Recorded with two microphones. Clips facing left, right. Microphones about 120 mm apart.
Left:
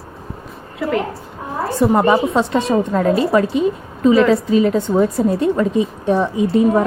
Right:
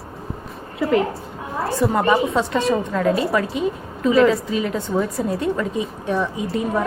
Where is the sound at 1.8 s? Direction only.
25° left (ahead or behind).